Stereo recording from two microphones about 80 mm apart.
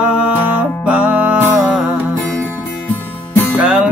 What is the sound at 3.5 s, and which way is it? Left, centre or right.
Music, centre.